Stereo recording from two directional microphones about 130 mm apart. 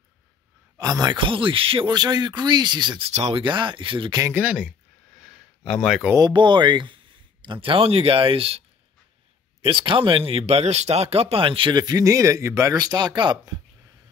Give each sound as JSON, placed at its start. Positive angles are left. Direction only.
{"t": 0.7, "sound": "speech", "side_deg": -30}
{"t": 3.1, "sound": "speech", "side_deg": -55}
{"t": 3.4, "sound": "speech", "side_deg": -40}
{"t": 4.2, "sound": "speech", "side_deg": -15}
{"t": 5.2, "sound": "a sound", "side_deg": 0}
{"t": 6.1, "sound": "speech", "side_deg": -35}